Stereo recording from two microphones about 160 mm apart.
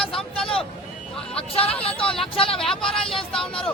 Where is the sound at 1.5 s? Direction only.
35° left (ahead or behind).